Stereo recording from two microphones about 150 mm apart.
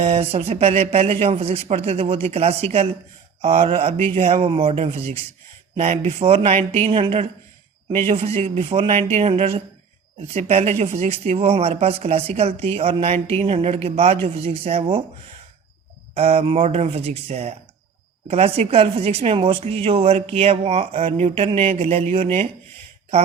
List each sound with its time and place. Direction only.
0.0 s a woman's voice: 45° right (ahead or behind)
16.1 s a woman's voice: 40° right (ahead or behind)